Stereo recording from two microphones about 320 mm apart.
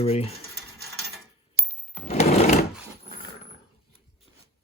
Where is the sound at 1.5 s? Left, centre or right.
Centre.